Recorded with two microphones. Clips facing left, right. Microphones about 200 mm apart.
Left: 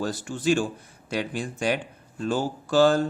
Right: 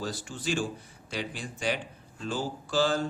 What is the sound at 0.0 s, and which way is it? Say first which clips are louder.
Speech: left 8 dB; 50° left (ahead or behind).